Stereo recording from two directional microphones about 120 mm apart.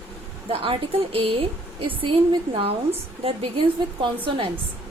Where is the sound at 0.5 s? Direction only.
50° right (ahead or behind).